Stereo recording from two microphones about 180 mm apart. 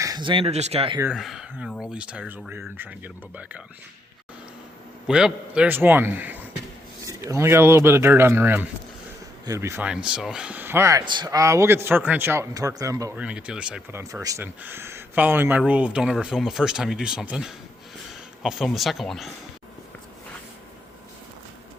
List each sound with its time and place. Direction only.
0.0 s speech: 25° right (ahead or behind)
1.1 s speech: centre (ahead or behind)
5.0 s speech: 5° right (ahead or behind)
13.1 s speech: 5° right (ahead or behind)
14.0 s speech: 20° right (ahead or behind); by 19.3 s centre (ahead or behind)